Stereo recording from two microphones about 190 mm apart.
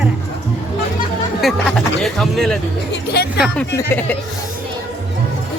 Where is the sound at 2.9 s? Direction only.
60° left (ahead or behind).